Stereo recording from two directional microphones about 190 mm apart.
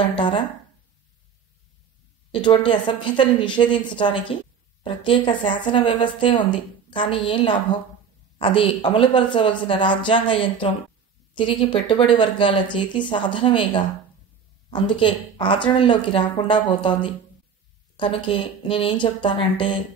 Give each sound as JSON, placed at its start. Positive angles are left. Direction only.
{"t": 0.1, "sound": "speech", "side_deg": 25}
{"t": 2.3, "sound": "speech", "side_deg": 25}